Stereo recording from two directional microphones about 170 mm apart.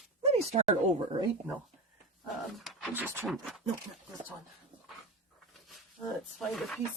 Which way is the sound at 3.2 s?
Centre (ahead or behind).